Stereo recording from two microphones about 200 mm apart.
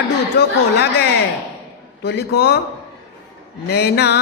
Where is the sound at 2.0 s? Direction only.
55° left (ahead or behind).